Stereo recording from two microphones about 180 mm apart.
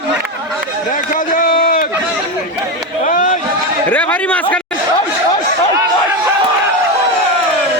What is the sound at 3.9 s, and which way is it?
Speech, 10° left (ahead or behind).